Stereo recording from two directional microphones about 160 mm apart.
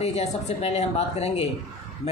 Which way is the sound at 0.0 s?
45° left (ahead or behind).